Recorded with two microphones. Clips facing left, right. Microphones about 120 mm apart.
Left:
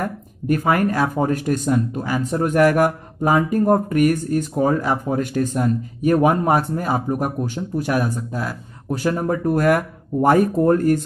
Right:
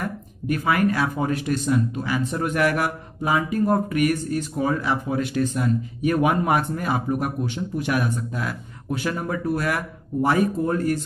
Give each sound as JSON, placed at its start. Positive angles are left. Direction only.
{"t": 0.7, "sound": "speech", "side_deg": 45}